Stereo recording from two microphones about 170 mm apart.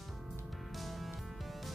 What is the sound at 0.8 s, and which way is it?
Music, centre (ahead or behind).